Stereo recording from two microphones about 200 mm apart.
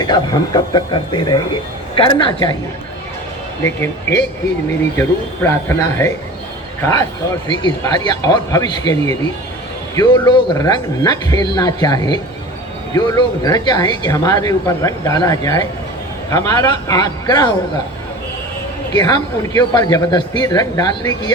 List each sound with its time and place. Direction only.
0.0 s speech: 20° left (ahead or behind)
3.6 s speech: 15° left (ahead or behind)
18.9 s speech: 20° left (ahead or behind)